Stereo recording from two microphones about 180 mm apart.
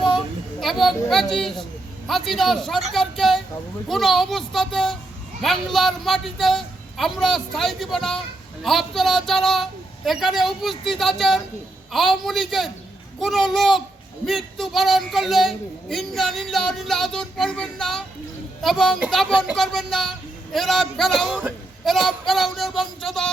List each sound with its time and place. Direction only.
0.6 s speech: centre (ahead or behind)
2.9 s a sound: centre (ahead or behind)
3.8 s speech: centre (ahead or behind)